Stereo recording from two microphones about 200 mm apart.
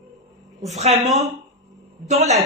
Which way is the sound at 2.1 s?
35° right (ahead or behind).